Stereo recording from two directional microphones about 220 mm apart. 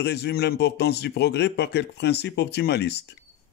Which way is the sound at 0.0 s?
50° left (ahead or behind).